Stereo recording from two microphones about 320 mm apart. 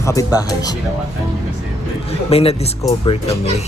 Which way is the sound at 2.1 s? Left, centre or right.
Centre.